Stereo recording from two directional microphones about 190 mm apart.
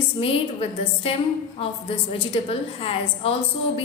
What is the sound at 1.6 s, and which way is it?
A woman's voice, 30° left (ahead or behind).